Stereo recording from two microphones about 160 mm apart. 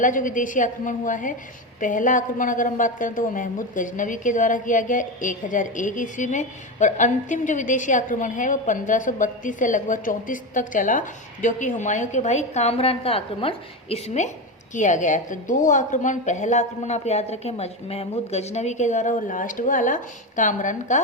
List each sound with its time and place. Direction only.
0.0 s a woman's voice: 55° left (ahead or behind)